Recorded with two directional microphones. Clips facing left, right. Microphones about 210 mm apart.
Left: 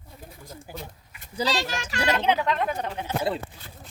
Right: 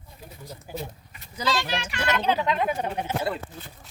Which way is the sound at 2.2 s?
15° left (ahead or behind).